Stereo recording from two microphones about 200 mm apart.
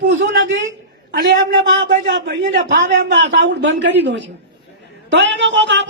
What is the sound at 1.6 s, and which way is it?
A man's voice, 65° right (ahead or behind).